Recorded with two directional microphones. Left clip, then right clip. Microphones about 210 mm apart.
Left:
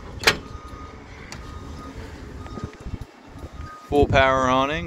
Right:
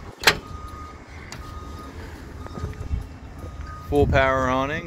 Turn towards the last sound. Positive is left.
turn(degrees=15)  # may be behind; listen again after turning